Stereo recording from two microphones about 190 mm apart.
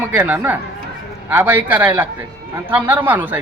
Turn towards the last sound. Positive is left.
turn(degrees=-10)  # may be behind; listen again after turning